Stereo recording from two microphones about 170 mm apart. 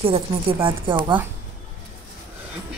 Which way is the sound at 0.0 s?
35° right (ahead or behind).